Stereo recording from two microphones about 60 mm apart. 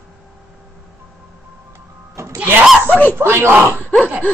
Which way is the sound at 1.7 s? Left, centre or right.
Right.